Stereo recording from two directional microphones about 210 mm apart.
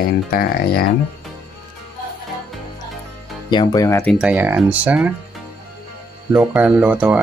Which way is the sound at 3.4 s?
20° left (ahead or behind).